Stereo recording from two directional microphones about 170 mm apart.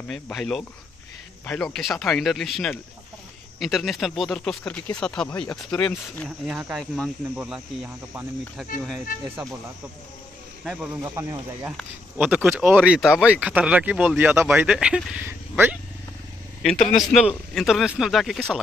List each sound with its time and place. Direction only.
0.1 s speech: 5° left (ahead or behind)
9.1 s speech: 50° left (ahead or behind)
10.6 s speech: centre (ahead or behind)
11.0 s speech: 15° right (ahead or behind)
16.8 s speech: centre (ahead or behind)